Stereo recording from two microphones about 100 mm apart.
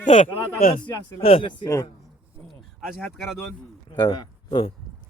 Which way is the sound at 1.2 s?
65° left (ahead or behind).